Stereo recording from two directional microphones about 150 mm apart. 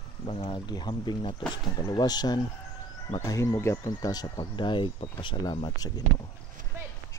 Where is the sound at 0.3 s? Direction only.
35° left (ahead or behind).